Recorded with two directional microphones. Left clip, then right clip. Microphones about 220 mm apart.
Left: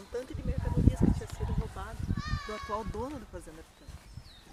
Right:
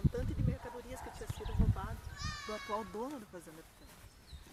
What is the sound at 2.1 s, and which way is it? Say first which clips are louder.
Children playing: left 3 dB; 20° right (ahead or behind).